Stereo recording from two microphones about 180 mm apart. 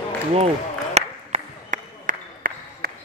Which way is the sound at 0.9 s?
40° right (ahead or behind).